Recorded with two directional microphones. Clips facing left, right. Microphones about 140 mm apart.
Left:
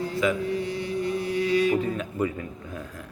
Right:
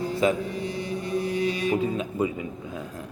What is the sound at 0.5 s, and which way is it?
Music, 20° right (ahead or behind).